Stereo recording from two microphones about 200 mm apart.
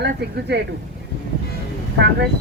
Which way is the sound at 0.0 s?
60° right (ahead or behind).